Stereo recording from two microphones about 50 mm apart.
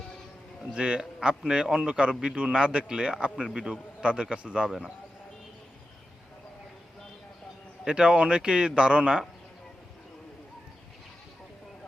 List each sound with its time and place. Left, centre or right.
0.7 s a man's voice: centre
7.9 s a man's voice: centre